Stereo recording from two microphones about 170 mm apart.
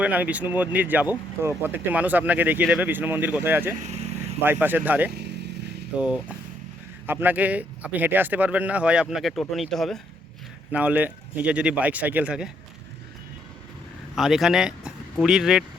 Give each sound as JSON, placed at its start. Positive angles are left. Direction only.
{"t": 0.0, "sound": "speech", "side_deg": -10}
{"t": 5.1, "sound": "vehicle", "side_deg": -85}
{"t": 6.0, "sound": "speech", "side_deg": -5}
{"t": 14.2, "sound": "speech", "side_deg": 0}